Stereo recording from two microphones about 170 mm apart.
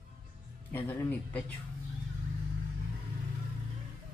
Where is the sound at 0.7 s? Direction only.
15° left (ahead or behind).